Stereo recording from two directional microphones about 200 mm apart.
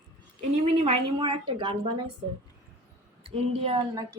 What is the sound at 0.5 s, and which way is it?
A woman's voice, 30° right (ahead or behind).